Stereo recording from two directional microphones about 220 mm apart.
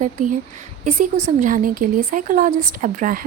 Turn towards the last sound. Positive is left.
turn(degrees=-40)  # may be behind; listen again after turning